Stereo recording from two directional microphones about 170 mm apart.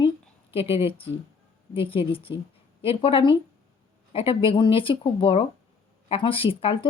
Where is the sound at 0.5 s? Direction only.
35° left (ahead or behind).